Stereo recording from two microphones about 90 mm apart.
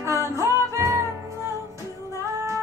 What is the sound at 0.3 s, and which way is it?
Music, 35° right (ahead or behind).